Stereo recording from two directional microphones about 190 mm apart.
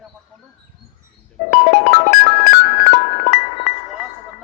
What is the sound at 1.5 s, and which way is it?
Music, 40° left (ahead or behind).